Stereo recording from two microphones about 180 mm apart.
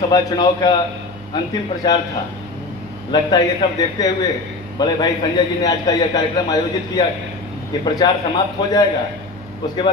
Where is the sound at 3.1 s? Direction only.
20° left (ahead or behind).